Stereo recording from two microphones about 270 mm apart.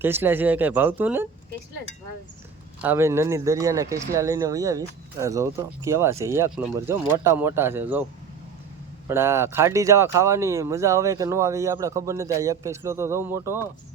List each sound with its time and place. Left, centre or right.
0.0 s speech: centre
2.8 s speech: centre
9.0 s speech: centre